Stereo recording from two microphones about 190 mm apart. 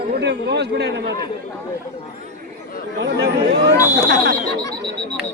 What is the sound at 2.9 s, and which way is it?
Speech, 65° right (ahead or behind).